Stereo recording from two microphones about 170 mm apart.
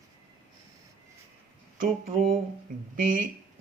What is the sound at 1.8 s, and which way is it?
Speech, 55° right (ahead or behind).